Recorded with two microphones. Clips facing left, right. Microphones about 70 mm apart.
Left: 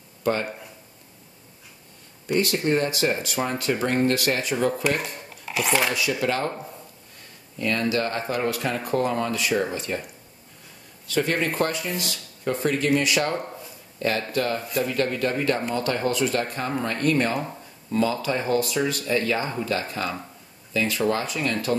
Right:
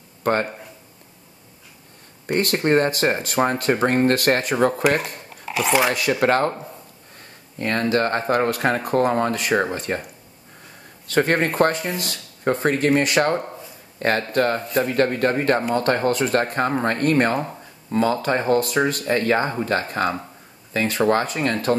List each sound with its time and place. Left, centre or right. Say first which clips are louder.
0.2 s speech: right 4 dB; right
2.2 s speech: right 3 dB; right
5.4 s a sound: right 4 dB; centre
5.9 s speech: right 5 dB; right
7.5 s speech: right 3 dB; right
11.1 s speech: right 5 dB; right